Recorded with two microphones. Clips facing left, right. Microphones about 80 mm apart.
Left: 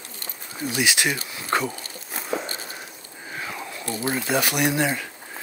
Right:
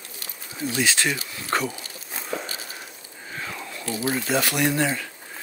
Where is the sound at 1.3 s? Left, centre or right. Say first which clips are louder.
Left 1 dB; left.